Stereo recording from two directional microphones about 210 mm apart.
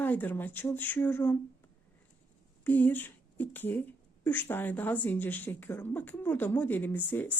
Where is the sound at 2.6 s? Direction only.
10° left (ahead or behind).